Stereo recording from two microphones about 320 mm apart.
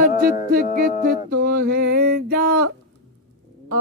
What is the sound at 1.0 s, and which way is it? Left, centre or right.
Music, right.